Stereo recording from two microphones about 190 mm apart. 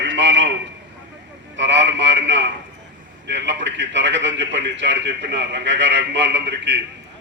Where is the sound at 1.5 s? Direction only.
70° right (ahead or behind).